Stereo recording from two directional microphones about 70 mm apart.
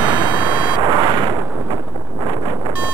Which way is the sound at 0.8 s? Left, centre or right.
Right.